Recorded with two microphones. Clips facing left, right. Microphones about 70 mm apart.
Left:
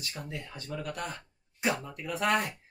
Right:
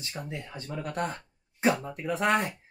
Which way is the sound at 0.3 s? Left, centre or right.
Right.